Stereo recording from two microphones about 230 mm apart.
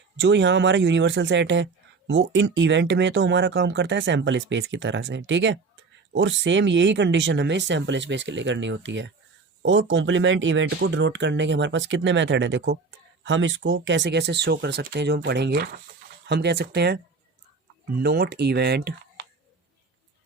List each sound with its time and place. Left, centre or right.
0.2 s speech: right